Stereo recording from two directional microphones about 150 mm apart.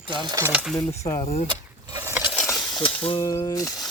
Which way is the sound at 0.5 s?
Centre (ahead or behind).